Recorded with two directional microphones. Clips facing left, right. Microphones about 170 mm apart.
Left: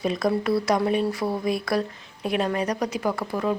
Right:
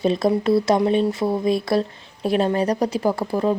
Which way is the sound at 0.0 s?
25° right (ahead or behind).